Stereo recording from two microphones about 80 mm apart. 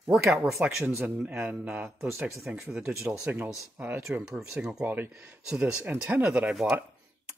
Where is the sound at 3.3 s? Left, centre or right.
Right.